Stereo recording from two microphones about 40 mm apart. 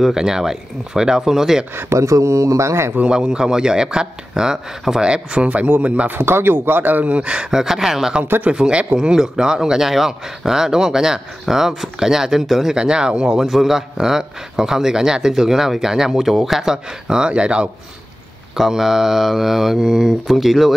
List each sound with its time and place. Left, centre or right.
0.0 s speech: centre
1.9 s speech: right
3.1 s speech: centre
5.0 s speech: right
5.5 s speech: right
6.0 s speech: right
6.6 s a man's voice: right
7.2 s speech: right
7.5 s speech: centre
8.5 s speech: right; by 12.7 s centre
12.7 s speech: right
13.4 s speech: centre; by 17.6 s right
18.6 s speech: centre